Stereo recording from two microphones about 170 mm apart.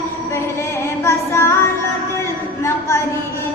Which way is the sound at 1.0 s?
15° left (ahead or behind).